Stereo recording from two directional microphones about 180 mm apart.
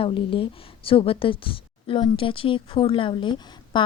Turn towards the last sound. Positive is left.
turn(degrees=25)  # may be behind; listen again after turning